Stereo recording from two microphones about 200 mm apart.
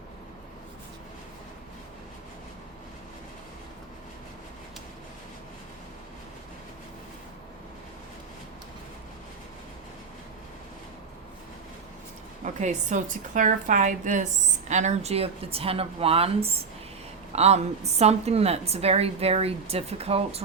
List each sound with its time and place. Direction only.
12.4 s a woman's voice: 40° right (ahead or behind)